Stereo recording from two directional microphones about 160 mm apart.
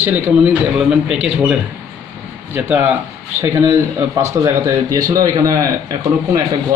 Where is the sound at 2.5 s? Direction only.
10° right (ahead or behind).